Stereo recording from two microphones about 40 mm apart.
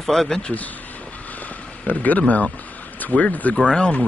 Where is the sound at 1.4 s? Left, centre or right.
Left.